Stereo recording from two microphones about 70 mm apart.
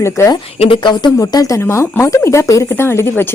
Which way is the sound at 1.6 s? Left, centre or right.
Left.